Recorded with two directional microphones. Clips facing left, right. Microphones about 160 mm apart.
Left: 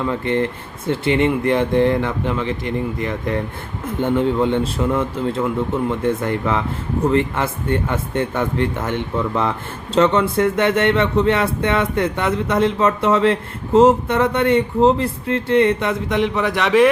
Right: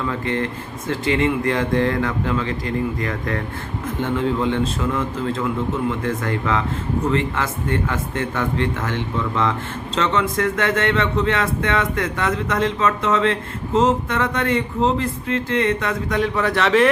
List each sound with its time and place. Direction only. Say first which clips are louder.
0.3 s speech: left 4 dB; 30° left (ahead or behind); by 16.9 s 10° left (ahead or behind)